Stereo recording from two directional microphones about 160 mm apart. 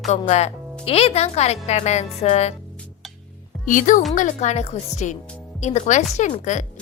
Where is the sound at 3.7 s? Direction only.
55° left (ahead or behind).